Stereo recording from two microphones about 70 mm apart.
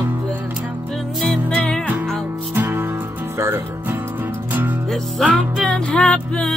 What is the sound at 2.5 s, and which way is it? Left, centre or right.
Music, right.